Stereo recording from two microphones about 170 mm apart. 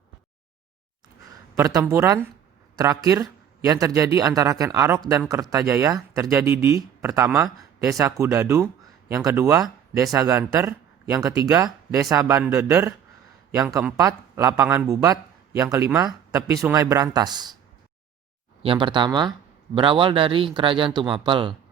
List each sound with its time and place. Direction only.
1.8 s speech: 15° right (ahead or behind)
18.6 s speech: 30° right (ahead or behind)